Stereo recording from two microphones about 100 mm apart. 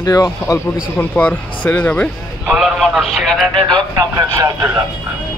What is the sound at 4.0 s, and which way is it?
Speech, 35° right (ahead or behind).